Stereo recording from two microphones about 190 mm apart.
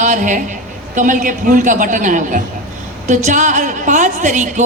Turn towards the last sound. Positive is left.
turn(degrees=-40)  # may be behind; listen again after turning